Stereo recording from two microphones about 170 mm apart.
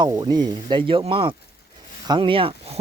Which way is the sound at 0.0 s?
25° right (ahead or behind).